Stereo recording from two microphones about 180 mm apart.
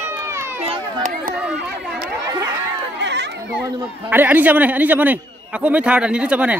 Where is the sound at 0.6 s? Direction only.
45° right (ahead or behind).